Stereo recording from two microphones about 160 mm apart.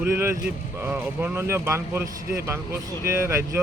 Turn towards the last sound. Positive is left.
turn(degrees=-15)  # may be behind; listen again after turning